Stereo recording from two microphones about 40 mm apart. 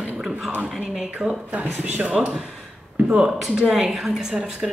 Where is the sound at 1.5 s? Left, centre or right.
Right.